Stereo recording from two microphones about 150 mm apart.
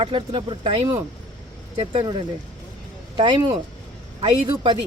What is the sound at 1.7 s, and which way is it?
Speech, 45° right (ahead or behind).